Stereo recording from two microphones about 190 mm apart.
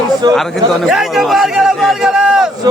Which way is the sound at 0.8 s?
Centre (ahead or behind).